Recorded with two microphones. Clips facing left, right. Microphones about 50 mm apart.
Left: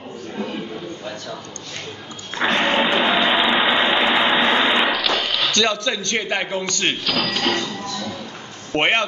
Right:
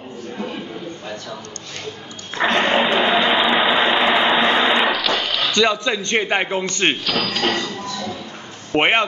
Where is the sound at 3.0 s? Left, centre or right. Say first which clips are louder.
Right 1 dB; centre.